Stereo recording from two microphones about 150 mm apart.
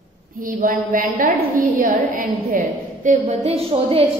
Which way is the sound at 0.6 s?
65° right (ahead or behind).